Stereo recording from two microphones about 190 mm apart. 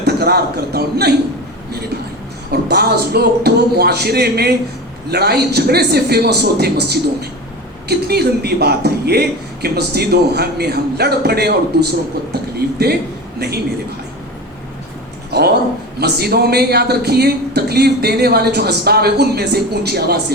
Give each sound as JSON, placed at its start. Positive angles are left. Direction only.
{"t": 0.0, "sound": "a man's voice", "side_deg": -55}
{"t": 2.5, "sound": "speech", "side_deg": -60}
{"t": 15.3, "sound": "speech", "side_deg": -55}